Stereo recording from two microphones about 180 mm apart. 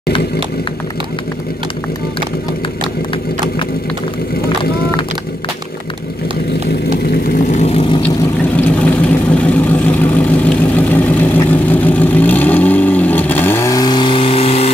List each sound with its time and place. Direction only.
7.5 s vehicle: 35° left (ahead or behind)
8.5 s vehicle: 5° left (ahead or behind); by 14.7 s 35° left (ahead or behind)